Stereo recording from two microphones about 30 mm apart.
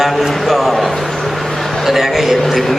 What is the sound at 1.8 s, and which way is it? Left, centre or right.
Speech, centre.